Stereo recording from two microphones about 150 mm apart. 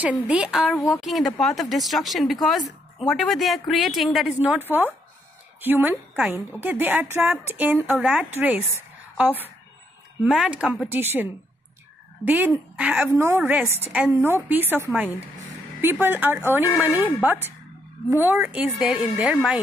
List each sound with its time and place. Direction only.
0.0 s a woman's voice: 10° right (ahead or behind)
12.3 s a woman's voice: 10° right (ahead or behind)